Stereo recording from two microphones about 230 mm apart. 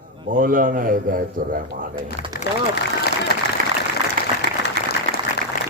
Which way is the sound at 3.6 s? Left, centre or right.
Right.